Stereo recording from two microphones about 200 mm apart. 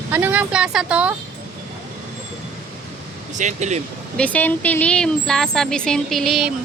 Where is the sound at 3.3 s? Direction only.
35° right (ahead or behind).